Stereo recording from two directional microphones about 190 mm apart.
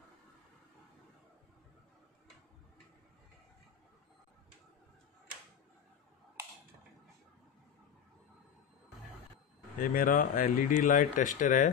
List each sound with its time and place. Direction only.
9.8 s speech: 45° left (ahead or behind)